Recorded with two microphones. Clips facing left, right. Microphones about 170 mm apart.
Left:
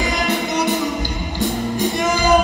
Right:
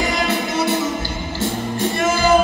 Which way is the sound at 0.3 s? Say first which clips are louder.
Even; 15° left (ahead or behind).